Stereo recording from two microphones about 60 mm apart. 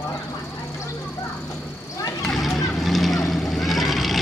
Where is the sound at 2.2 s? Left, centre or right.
Centre.